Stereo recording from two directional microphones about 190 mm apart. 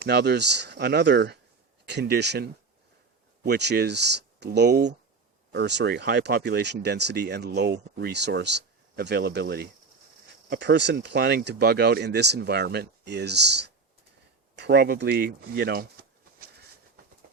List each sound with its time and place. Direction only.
0.0 s speech: 60° right (ahead or behind)